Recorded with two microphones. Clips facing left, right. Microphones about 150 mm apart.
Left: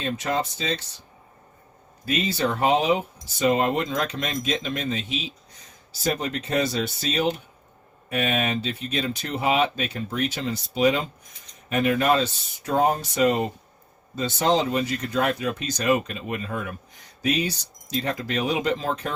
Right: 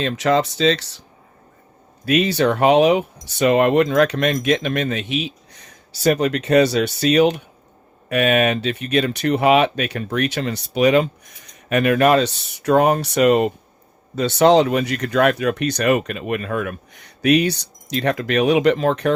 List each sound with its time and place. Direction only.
0.0 s speech: 90° right
2.0 s speech: 75° right (ahead or behind)